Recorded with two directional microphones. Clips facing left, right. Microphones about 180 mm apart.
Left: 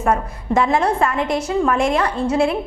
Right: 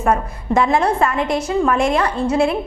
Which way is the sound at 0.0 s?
20° right (ahead or behind).